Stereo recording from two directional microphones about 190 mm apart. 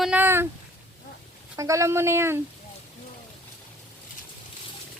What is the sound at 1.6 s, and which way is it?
Speech, 15° right (ahead or behind).